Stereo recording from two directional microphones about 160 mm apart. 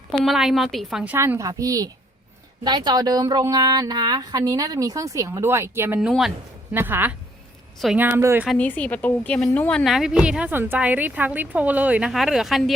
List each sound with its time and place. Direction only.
0.1 s a woman's voice: centre (ahead or behind)
6.0 s a woman's voice: 5° right (ahead or behind)
8.4 s a woman's voice: 10° left (ahead or behind)